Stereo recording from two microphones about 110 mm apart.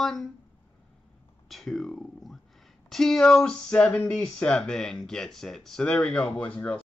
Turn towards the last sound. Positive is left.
turn(degrees=15)  # may be behind; listen again after turning